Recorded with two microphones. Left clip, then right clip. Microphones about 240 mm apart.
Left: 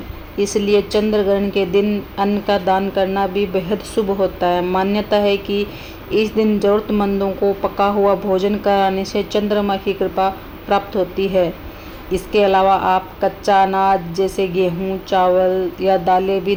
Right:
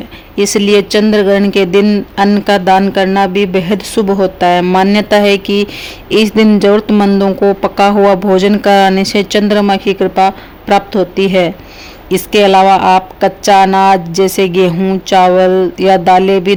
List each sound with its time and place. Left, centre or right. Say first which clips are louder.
0.3 s speech: right 7 dB; right